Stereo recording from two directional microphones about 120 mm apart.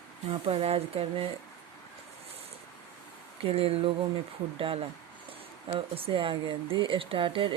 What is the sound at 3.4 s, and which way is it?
Speech, 55° right (ahead or behind).